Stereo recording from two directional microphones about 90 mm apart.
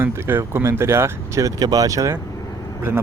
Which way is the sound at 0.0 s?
25° right (ahead or behind).